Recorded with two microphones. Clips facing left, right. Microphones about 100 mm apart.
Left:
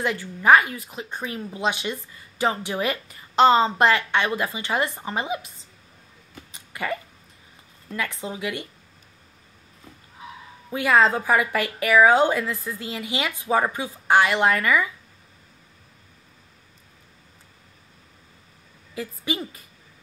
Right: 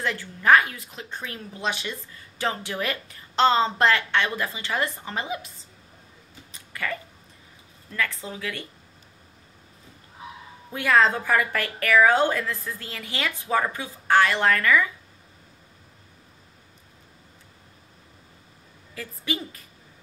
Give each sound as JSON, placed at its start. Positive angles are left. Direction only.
{"t": 0.0, "sound": "speech", "side_deg": 10}
{"t": 6.7, "sound": "a sound", "side_deg": 20}
{"t": 7.9, "sound": "a woman's voice", "side_deg": 20}
{"t": 10.7, "sound": "speech", "side_deg": 10}
{"t": 18.9, "sound": "speech", "side_deg": 10}